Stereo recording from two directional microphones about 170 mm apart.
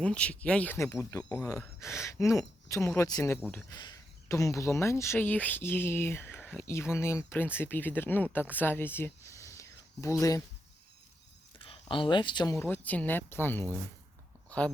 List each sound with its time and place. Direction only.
0.0 s speech: 5° left (ahead or behind)
3.3 s speech: 5° left (ahead or behind)
3.7 s speech: 20° left (ahead or behind)
11.6 s speech: 30° left (ahead or behind)
12.5 s speech: 10° left (ahead or behind)